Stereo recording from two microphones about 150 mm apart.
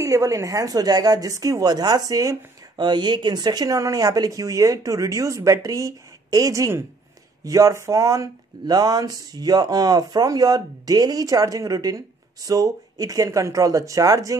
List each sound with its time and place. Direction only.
0.0 s speech: 20° right (ahead or behind)